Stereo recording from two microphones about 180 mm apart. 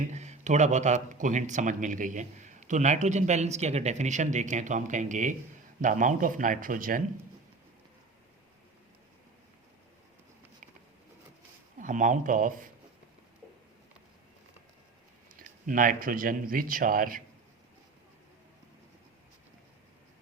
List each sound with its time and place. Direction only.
0.1 s speech: 40° right (ahead or behind)
11.8 s speech: 45° right (ahead or behind)
15.4 s speech: 50° right (ahead or behind)